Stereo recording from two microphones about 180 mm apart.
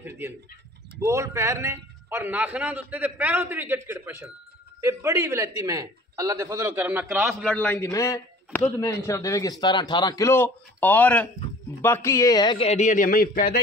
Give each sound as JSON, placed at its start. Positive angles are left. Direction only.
{"t": 0.0, "sound": "a man's voice", "side_deg": -10}
{"t": 12.6, "sound": "a man's voice", "side_deg": 40}